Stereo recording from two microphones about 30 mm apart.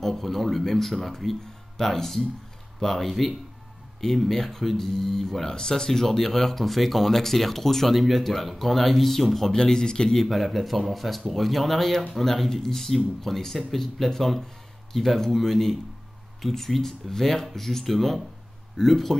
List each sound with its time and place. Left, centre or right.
0.0 s speech: centre
9.5 s speech: left
10.2 s speech: centre